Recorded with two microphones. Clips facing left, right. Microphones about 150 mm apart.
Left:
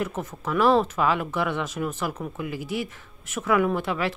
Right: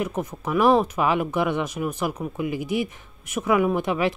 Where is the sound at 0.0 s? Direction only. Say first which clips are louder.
Right 2 dB; 15° right (ahead or behind).